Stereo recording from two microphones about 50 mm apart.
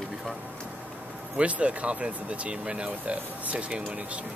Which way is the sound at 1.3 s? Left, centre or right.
Right.